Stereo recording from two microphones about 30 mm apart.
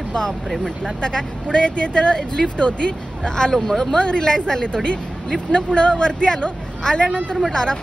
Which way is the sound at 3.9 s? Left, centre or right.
Left.